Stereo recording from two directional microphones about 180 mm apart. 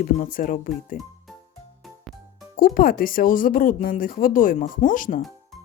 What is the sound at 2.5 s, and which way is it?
Speech, 50° left (ahead or behind).